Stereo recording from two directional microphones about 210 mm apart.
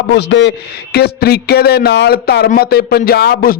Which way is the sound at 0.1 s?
55° left (ahead or behind).